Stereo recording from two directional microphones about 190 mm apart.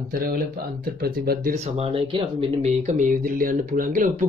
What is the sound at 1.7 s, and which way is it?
Speech, 30° right (ahead or behind).